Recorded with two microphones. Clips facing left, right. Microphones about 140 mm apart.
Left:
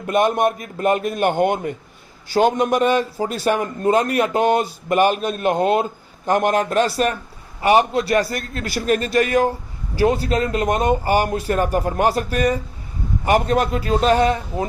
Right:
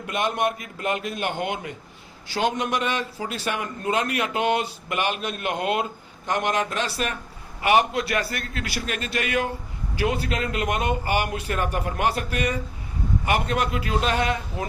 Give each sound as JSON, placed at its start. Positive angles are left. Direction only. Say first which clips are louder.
{"t": 0.1, "sound": "a man's voice", "louder": "left 7 dB", "side_deg": 45}